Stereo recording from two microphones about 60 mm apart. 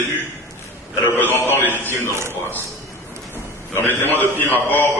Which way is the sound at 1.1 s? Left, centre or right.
Left.